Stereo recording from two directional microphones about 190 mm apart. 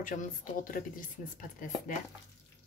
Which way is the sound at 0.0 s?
45° left (ahead or behind).